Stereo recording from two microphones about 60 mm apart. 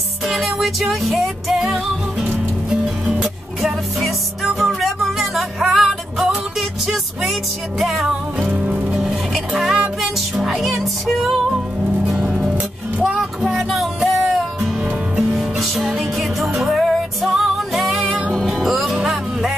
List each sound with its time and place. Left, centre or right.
0.3 s music: centre
7.8 s music: centre
8.4 s music: right
8.9 s music: centre
12.2 s music: right
13.0 s music: centre
15.3 s music: centre
16.8 s music: centre